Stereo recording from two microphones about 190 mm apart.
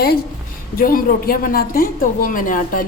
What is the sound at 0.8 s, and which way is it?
A woman's voice, 50° left (ahead or behind).